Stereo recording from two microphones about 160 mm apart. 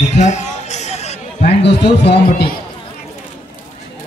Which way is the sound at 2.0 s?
90° left.